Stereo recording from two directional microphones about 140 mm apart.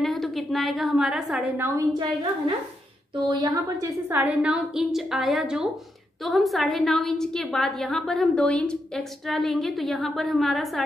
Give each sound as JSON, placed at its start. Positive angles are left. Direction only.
{"t": 0.0, "sound": "a woman's voice", "side_deg": 0}
{"t": 1.6, "sound": "a woman's voice", "side_deg": -25}
{"t": 3.3, "sound": "a woman's voice", "side_deg": -30}
{"t": 4.2, "sound": "a woman's voice", "side_deg": -10}